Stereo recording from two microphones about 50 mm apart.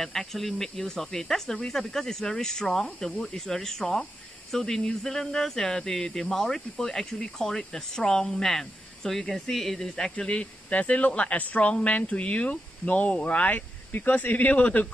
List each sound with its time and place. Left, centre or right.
0.0 s speech: centre; by 14.9 s left